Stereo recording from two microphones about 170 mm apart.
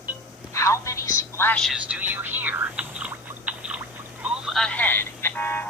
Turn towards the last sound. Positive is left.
turn(degrees=10)  # may be behind; listen again after turning